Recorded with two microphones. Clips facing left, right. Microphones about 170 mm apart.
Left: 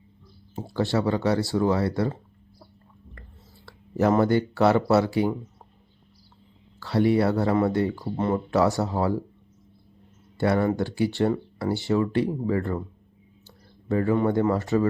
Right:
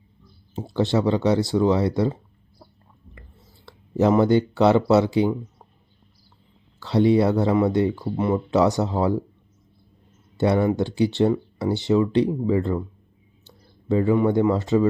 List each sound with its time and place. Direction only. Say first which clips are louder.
0.7 s speech: right 3 dB; 20° right (ahead or behind)
3.7 s speech: right 3 dB; 20° right (ahead or behind)
6.7 s speech: right 3 dB; 20° right (ahead or behind)
10.3 s speech: right 3 dB; 20° right (ahead or behind)
13.8 s speech: right 3 dB; 15° right (ahead or behind)